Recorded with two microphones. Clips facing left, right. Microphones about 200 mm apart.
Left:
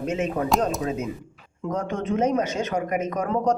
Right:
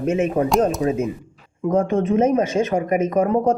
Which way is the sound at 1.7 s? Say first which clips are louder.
Right 8 dB; 25° right (ahead or behind).